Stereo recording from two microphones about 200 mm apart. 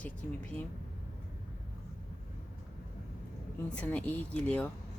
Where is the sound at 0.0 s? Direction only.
5° left (ahead or behind).